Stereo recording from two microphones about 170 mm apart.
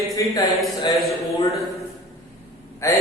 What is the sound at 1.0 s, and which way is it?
Speech, centre (ahead or behind).